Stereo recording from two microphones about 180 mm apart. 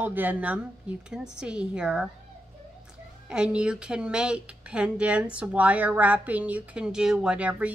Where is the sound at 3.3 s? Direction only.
5° right (ahead or behind).